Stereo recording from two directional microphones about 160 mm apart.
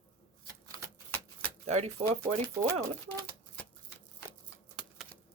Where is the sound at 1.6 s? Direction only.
45° right (ahead or behind).